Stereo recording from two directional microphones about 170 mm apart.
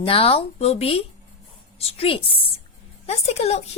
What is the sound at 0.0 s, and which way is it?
A woman's voice, 35° left (ahead or behind).